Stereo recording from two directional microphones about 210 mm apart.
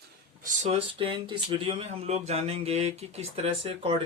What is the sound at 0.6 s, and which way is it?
Speech, 25° right (ahead or behind).